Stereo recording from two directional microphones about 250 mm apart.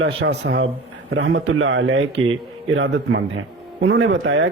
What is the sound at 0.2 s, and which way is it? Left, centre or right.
Speech, right.